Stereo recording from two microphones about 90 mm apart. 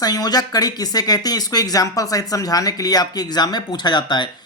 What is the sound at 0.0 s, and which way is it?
Speech, 45° left (ahead or behind).